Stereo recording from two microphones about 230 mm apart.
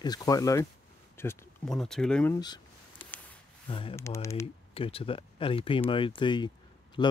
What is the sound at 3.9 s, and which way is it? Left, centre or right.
Speech, centre.